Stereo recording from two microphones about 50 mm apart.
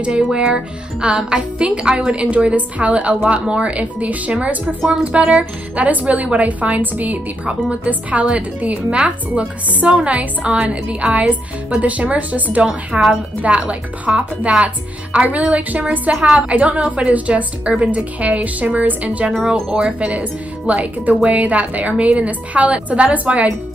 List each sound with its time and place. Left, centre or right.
0.0 s a woman's voice: centre
12.6 s a woman's voice: centre
13.4 s a woman's voice: right